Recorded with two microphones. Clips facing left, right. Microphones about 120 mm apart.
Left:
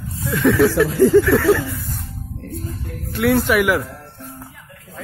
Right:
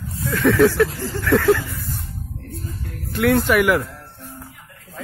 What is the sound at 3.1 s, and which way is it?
Speech, centre (ahead or behind).